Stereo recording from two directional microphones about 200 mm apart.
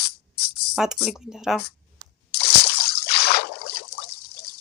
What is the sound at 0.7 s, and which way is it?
Speech, 5° right (ahead or behind).